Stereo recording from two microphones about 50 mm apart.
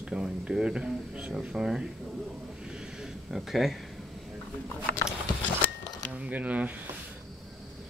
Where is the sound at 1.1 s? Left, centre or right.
Centre.